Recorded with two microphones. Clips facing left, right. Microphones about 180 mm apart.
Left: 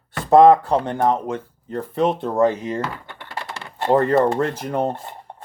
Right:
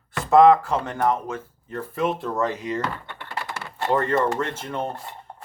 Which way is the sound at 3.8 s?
20° left (ahead or behind).